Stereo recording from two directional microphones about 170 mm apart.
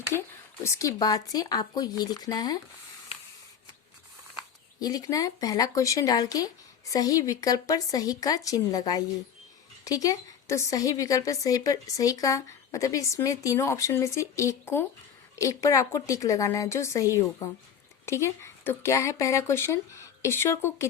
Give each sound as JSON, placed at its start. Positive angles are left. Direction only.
{"t": 0.6, "sound": "speech", "side_deg": 15}
{"t": 4.8, "sound": "speech", "side_deg": 20}